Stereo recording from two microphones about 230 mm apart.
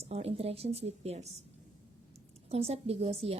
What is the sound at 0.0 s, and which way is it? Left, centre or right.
A woman's voice, right.